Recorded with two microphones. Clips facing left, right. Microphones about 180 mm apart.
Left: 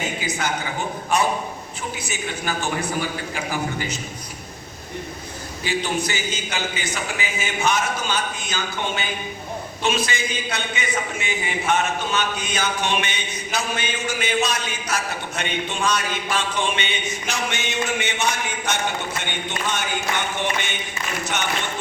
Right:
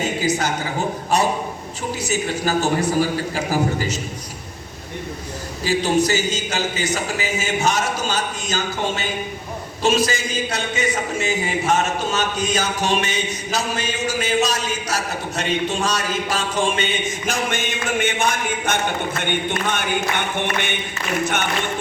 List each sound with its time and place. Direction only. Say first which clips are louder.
0.2 s a man's voice: right 5 dB; 40° right (ahead or behind)
5.6 s a man's voice: right 6 dB; 40° right (ahead or behind)
10.1 s a man's voice: right 3 dB; 40° right (ahead or behind)
19.2 s a sound: right 5 dB; 55° right (ahead or behind)